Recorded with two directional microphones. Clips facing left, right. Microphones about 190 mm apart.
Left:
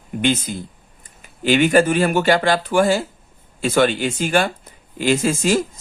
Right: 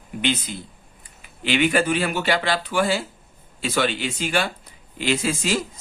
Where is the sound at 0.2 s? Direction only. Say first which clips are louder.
Left 5 dB; 45° left (ahead or behind).